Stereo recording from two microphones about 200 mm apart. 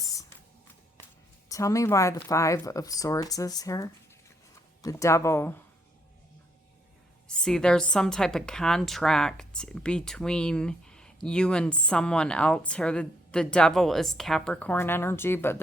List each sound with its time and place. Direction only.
0.0 s a sound: 15° left (ahead or behind)
1.5 s speech: 15° left (ahead or behind)
7.3 s a woman's voice: 5° left (ahead or behind)